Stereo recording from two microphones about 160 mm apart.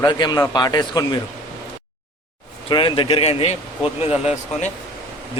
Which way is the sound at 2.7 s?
30° left (ahead or behind).